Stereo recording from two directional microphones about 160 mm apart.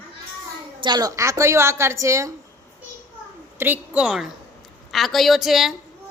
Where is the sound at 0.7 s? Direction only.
25° right (ahead or behind).